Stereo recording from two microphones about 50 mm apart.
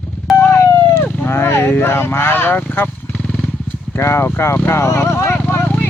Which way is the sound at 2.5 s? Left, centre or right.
Left.